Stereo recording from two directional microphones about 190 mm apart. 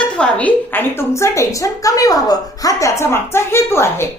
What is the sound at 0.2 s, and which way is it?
A woman's voice, 5° left (ahead or behind).